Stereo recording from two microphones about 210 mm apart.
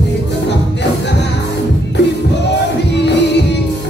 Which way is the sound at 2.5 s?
55° left (ahead or behind).